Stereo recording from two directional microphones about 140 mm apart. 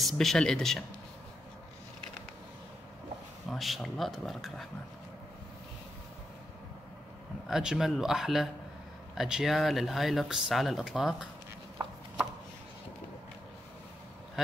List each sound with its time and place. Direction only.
0.0 s speech: centre (ahead or behind)
3.4 s speech: centre (ahead or behind)
7.4 s speech: 5° right (ahead or behind)
11.8 s chopping: 25° right (ahead or behind)